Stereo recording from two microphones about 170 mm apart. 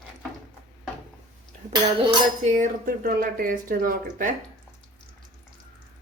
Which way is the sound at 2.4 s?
50° right (ahead or behind).